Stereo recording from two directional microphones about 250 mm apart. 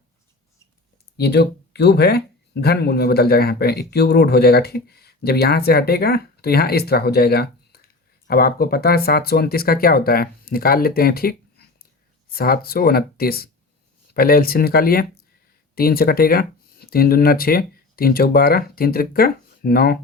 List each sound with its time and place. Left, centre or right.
1.1 s speech: left